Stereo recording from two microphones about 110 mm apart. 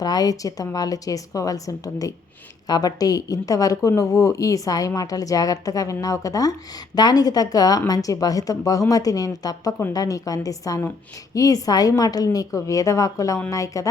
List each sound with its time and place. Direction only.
0.0 s speech: 35° left (ahead or behind)